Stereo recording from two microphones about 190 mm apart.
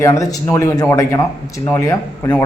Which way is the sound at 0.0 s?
15° left (ahead or behind).